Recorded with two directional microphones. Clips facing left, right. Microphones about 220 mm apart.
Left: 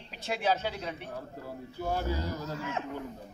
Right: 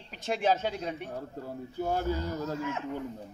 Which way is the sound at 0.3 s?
45° right (ahead or behind).